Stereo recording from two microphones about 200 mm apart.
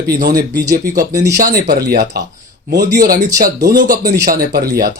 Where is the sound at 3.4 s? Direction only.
45° right (ahead or behind).